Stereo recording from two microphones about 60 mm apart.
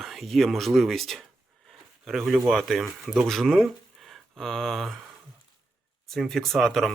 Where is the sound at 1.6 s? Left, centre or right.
Centre.